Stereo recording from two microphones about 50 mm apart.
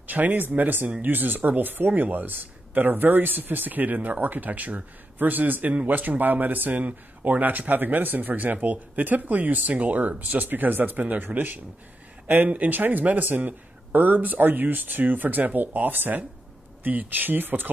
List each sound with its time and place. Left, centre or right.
0.0 s speech: right